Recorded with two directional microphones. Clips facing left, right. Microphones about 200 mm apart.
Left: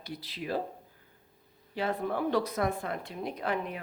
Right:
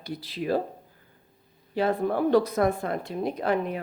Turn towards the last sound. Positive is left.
turn(degrees=-40)  # may be behind; listen again after turning